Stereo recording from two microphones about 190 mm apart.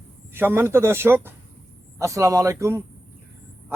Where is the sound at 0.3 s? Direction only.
10° right (ahead or behind).